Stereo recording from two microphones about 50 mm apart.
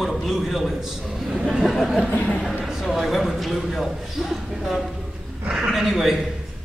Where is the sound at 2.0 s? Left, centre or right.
Left.